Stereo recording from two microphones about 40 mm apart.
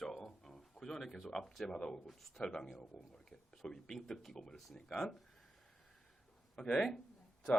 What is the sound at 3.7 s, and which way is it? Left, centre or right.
A man's voice, centre.